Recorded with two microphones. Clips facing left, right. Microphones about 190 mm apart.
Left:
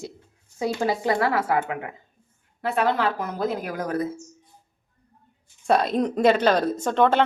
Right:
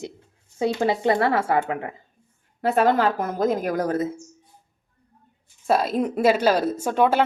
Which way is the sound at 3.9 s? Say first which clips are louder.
Right 2 dB; 25° right (ahead or behind).